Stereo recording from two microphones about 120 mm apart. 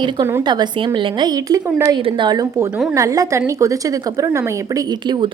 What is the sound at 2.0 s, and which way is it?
A woman's voice, 45° right (ahead or behind).